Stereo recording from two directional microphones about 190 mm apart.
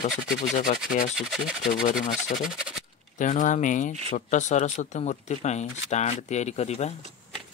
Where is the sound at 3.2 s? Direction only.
40° left (ahead or behind).